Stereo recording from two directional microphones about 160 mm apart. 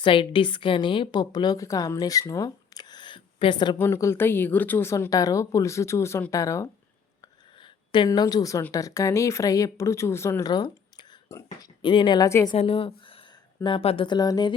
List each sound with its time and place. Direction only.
0.0 s a woman's voice: 30° left (ahead or behind)
3.8 s a woman's voice: 15° left (ahead or behind)
12.5 s a woman's voice: 35° left (ahead or behind)